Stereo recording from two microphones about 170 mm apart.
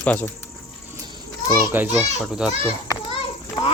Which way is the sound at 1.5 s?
10° right (ahead or behind).